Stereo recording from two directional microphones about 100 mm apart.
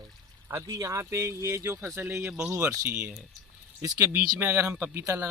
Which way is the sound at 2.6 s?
30° right (ahead or behind).